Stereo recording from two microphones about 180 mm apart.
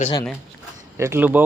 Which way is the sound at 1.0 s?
10° right (ahead or behind).